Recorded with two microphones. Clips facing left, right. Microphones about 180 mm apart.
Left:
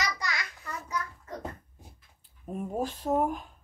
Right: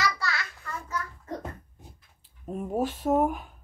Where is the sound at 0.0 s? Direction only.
15° left (ahead or behind).